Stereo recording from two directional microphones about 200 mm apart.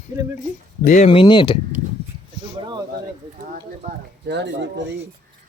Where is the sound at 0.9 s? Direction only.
35° left (ahead or behind).